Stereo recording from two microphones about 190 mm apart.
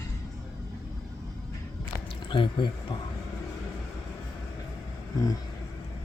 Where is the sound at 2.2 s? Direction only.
25° left (ahead or behind).